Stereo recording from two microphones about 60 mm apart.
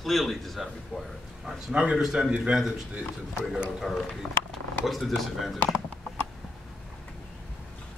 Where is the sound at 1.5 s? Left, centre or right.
Centre.